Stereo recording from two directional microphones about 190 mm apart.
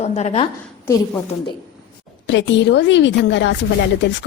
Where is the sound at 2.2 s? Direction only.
70° left (ahead or behind).